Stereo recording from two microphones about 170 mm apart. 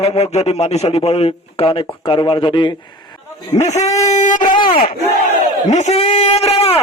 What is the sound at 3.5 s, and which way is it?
Speech, 45° left (ahead or behind).